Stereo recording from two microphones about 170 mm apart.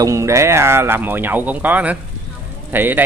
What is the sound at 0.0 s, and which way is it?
A man's voice, 15° right (ahead or behind).